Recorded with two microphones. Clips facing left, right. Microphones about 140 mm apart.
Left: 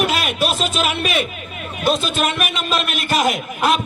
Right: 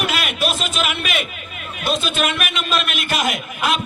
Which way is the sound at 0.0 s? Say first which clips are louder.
Left 3 dB; 40° left (ahead or behind).